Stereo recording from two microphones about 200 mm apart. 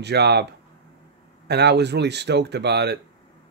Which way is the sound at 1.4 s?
55° right (ahead or behind).